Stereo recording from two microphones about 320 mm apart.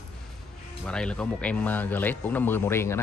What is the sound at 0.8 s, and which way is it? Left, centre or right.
Speech, centre.